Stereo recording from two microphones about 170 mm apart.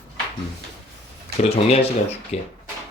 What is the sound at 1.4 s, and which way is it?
Speech, 35° left (ahead or behind).